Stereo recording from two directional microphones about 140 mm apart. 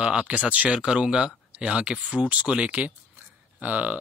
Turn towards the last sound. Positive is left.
turn(degrees=-10)  # may be behind; listen again after turning